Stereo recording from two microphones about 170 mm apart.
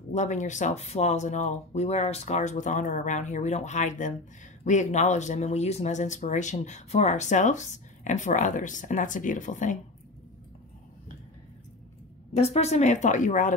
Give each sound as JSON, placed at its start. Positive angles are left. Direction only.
{"t": 0.1, "sound": "speech", "side_deg": 45}
{"t": 12.4, "sound": "speech", "side_deg": 35}